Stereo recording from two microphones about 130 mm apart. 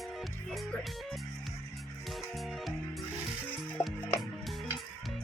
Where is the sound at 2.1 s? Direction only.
Centre (ahead or behind).